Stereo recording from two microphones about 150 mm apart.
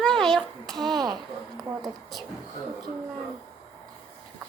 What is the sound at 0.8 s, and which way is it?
Speech, 25° right (ahead or behind).